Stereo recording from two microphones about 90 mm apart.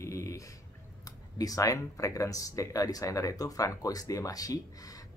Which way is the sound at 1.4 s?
40° left (ahead or behind).